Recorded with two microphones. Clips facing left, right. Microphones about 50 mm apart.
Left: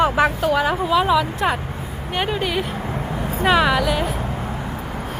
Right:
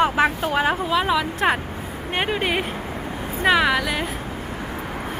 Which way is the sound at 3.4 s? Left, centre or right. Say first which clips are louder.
Left 1 dB; centre.